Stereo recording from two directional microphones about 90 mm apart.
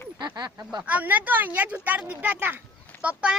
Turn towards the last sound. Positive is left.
turn(degrees=-10)  # may be behind; listen again after turning